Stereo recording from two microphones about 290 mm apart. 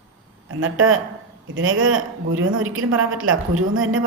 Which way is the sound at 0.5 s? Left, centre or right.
Right.